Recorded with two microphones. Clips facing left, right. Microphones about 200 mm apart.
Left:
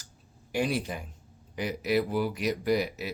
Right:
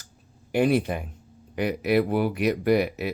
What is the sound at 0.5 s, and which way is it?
Speech, 60° right (ahead or behind).